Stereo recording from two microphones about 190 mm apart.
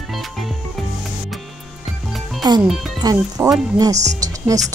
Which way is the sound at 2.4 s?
20° right (ahead or behind).